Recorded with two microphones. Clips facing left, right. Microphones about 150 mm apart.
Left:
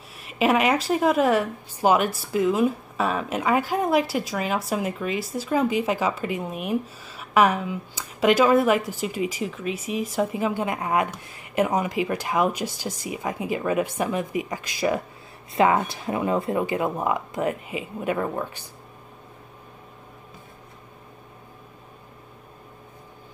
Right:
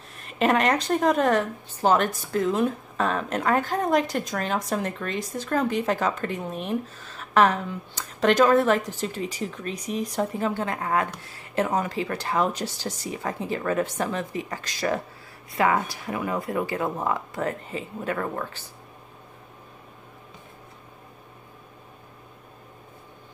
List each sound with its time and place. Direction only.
0.1 s speech: 5° left (ahead or behind)
15.5 s speech: 25° left (ahead or behind)